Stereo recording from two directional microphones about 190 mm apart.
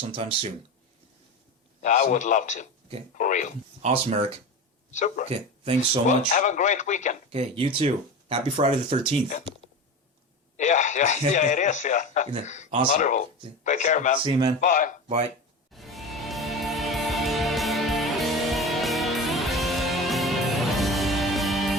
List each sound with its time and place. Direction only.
0.1 s speech: 30° right (ahead or behind)
1.8 s speech: 40° left (ahead or behind)
3.8 s speech: 35° right (ahead or behind)
4.9 s speech: 40° left (ahead or behind)
5.3 s speech: 30° right (ahead or behind)
6.1 s speech: 45° left (ahead or behind)
7.3 s speech: 30° right (ahead or behind)
10.6 s speech: 40° left (ahead or behind)
14.3 s speech: 20° right (ahead or behind)
14.6 s speech: 45° left (ahead or behind)
15.0 s speech: 35° right (ahead or behind)
15.7 s music: centre (ahead or behind)